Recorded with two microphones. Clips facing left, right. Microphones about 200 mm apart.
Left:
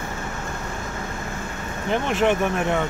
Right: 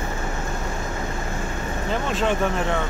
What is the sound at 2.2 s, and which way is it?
Speech, 15° left (ahead or behind).